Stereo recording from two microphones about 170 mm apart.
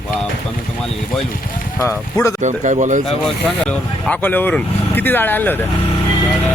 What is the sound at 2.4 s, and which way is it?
Speech, 45° right (ahead or behind).